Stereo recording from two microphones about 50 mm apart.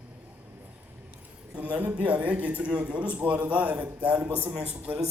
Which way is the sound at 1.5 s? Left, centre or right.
Right.